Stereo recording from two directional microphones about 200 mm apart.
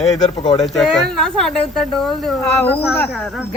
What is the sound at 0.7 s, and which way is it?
A woman's voice, centre (ahead or behind).